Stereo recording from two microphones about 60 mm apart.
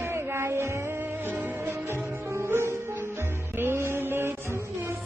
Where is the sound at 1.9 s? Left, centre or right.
Right.